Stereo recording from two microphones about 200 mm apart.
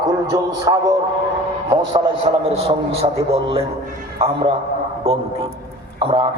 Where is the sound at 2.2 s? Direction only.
30° right (ahead or behind).